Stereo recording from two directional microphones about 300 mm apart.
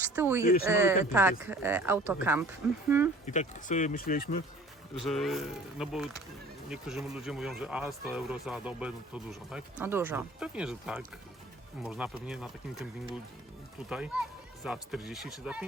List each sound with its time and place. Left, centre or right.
0.0 s speech: centre
3.2 s speech: left
4.9 s speech: centre